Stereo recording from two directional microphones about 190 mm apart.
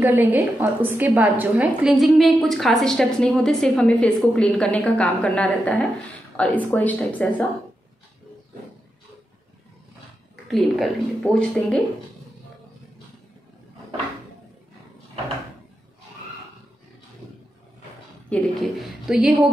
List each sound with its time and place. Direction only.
0.0 s a woman's voice: 10° right (ahead or behind); by 7.4 s 10° left (ahead or behind)
10.5 s a woman's voice: 5° left (ahead or behind)
18.3 s a woman's voice: centre (ahead or behind)